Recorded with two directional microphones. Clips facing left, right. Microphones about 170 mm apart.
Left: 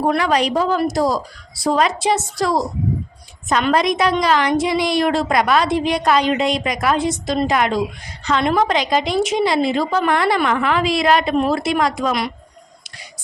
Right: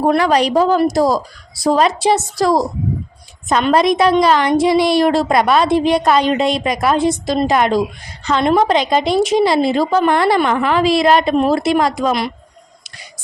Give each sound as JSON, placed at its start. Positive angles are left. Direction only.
{"t": 0.1, "sound": "a woman's voice", "side_deg": -35}